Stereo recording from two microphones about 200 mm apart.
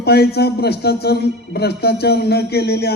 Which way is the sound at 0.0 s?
55° left (ahead or behind).